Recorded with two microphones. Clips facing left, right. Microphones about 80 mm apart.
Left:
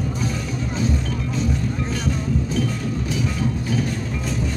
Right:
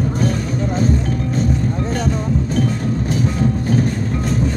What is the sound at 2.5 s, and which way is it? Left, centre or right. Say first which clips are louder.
Music: right 5 dB; right.